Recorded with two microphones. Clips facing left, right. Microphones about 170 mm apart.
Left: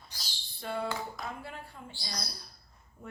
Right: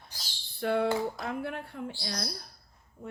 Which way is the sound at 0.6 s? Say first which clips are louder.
Right 8 dB; 65° right (ahead or behind).